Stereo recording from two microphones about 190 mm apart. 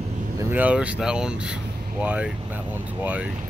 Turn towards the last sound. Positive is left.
turn(degrees=-10)  # may be behind; listen again after turning